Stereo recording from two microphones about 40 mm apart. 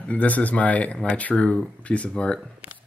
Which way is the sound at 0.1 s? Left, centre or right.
Left.